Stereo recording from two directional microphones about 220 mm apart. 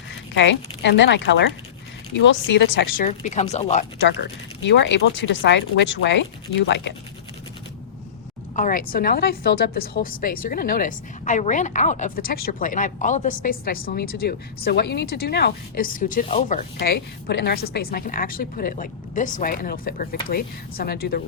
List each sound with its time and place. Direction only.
0.3 s a woman's voice: 55° left (ahead or behind)
3.1 s a woman's voice: 30° left (ahead or behind)
4.0 s a woman's voice: 55° left (ahead or behind)
8.5 s a woman's voice: 40° left (ahead or behind)
16.7 s a woman's voice: 45° left (ahead or behind)